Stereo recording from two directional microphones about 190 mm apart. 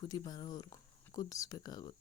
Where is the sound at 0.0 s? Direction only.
20° left (ahead or behind).